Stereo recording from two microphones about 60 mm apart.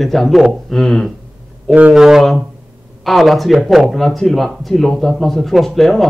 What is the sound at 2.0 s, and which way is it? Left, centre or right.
Speech, centre.